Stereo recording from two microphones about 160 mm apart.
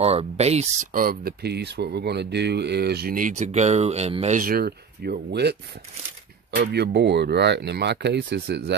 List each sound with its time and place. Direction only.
0.0 s speech: 40° right (ahead or behind)
0.9 s speech: 70° right (ahead or behind); by 4.4 s 40° right (ahead or behind)
4.4 s speech: 70° right (ahead or behind); by 8.7 s 90° right